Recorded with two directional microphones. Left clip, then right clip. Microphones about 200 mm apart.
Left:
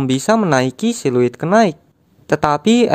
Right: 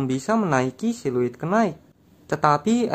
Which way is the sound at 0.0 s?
40° left (ahead or behind).